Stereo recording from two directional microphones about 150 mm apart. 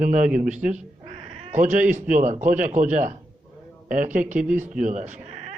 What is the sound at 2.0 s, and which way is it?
Speech, 60° right (ahead or behind).